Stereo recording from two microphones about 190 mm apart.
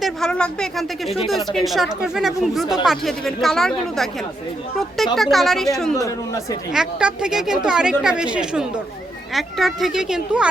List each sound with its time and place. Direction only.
0.0 s speech: 5° left (ahead or behind)
5.1 s speech: centre (ahead or behind)
6.0 s speech: 15° left (ahead or behind)
6.7 s speech: 5° right (ahead or behind)